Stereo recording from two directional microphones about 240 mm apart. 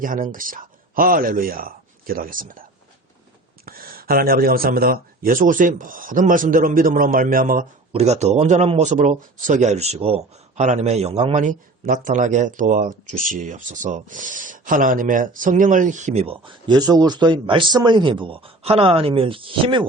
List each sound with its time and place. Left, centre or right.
0.0 s speech: right
3.7 s speech: right